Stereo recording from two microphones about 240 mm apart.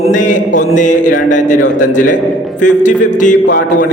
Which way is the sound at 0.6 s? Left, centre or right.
Left.